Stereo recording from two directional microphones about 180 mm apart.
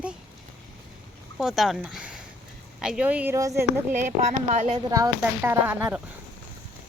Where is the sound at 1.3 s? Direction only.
Centre (ahead or behind); by 5.5 s 20° right (ahead or behind).